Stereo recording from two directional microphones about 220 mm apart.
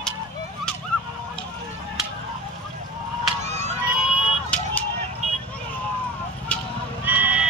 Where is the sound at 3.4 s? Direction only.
30° right (ahead or behind).